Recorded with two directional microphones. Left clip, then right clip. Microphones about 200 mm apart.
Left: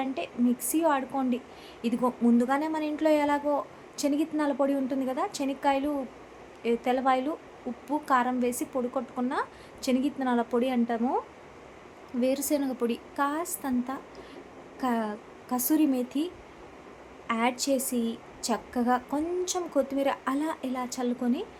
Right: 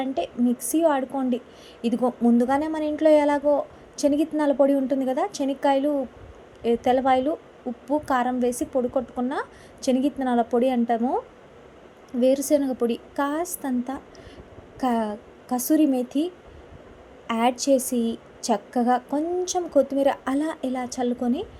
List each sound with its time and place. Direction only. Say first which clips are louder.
0.0 s a woman's voice: right 4 dB; 20° right (ahead or behind)
12.2 s a woman's voice: right 7 dB; 15° right (ahead or behind)